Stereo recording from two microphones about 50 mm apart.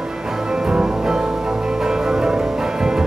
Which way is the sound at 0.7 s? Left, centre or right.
Centre.